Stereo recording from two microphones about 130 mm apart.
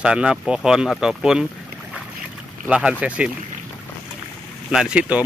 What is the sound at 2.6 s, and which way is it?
Speech, 10° right (ahead or behind).